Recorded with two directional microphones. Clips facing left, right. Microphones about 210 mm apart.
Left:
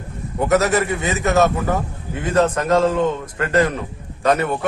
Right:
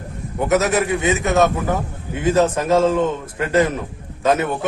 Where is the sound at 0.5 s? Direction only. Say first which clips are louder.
Even; centre (ahead or behind).